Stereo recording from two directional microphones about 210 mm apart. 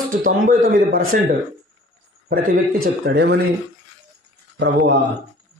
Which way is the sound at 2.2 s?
45° right (ahead or behind).